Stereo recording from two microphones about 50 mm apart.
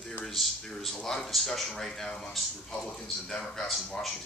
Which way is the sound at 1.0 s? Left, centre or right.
Centre.